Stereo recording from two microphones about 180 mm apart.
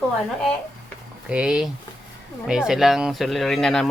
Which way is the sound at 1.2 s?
5° right (ahead or behind).